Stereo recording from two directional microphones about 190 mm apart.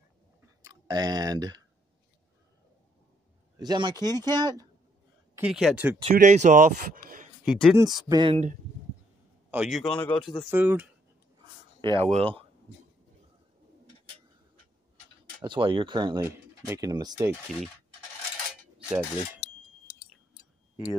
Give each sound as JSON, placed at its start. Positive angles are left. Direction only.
{"t": 0.6, "sound": "speech", "side_deg": -20}
{"t": 3.5, "sound": "speech", "side_deg": -20}
{"t": 5.3, "sound": "speech", "side_deg": -5}
{"t": 6.0, "sound": "speech", "side_deg": -40}
{"t": 7.4, "sound": "a man's voice", "side_deg": 5}
{"t": 8.1, "sound": "speech", "side_deg": -25}
{"t": 9.5, "sound": "a man's voice", "side_deg": -5}
{"t": 10.5, "sound": "speech", "side_deg": -10}
{"t": 11.8, "sound": "speech", "side_deg": -30}
{"t": 15.4, "sound": "speech", "side_deg": -25}
{"t": 18.9, "sound": "a man's voice", "side_deg": -5}
{"t": 19.9, "sound": "chewing", "side_deg": 60}